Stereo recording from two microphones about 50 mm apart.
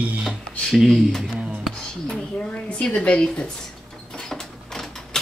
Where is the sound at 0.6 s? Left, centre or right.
Centre.